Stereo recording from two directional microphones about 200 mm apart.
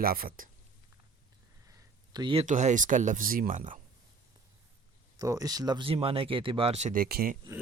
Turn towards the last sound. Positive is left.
turn(degrees=-50)  # may be behind; listen again after turning